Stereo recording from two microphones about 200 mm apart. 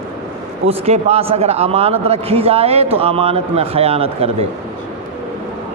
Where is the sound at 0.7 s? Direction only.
30° right (ahead or behind).